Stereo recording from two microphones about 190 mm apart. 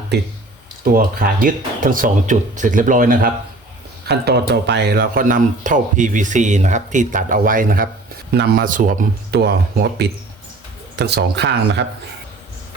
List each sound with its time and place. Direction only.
0.9 s speech: 50° right (ahead or behind)
4.0 s speech: 60° right (ahead or behind)